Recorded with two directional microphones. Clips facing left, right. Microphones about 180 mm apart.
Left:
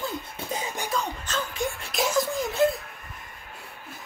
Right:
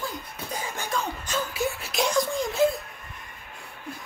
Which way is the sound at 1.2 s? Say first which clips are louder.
Right 2 dB; 10° right (ahead or behind).